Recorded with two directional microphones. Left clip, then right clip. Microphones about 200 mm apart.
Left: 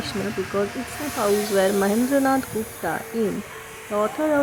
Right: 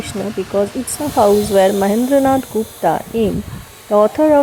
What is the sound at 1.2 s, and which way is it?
Speech, 15° right (ahead or behind).